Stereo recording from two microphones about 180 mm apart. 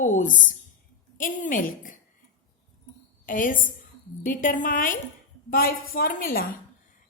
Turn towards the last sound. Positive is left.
turn(degrees=55)  # may be behind; listen again after turning